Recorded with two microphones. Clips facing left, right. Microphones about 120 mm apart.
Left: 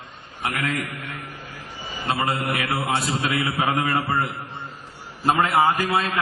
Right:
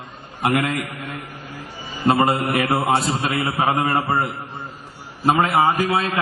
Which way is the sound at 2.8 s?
45° right (ahead or behind).